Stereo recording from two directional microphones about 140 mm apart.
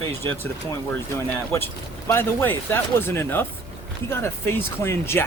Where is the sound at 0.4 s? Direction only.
15° left (ahead or behind).